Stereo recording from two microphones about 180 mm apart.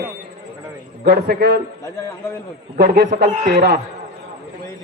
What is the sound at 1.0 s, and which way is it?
Speech, 65° right (ahead or behind).